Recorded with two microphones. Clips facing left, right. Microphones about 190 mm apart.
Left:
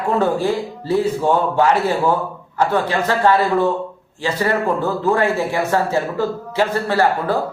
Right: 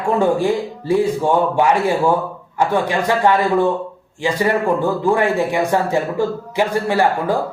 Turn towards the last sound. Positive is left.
turn(degrees=-15)  # may be behind; listen again after turning